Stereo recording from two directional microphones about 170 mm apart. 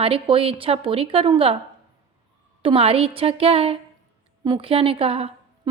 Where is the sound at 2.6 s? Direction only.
35° right (ahead or behind).